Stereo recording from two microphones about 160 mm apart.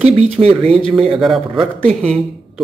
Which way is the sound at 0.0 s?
40° right (ahead or behind).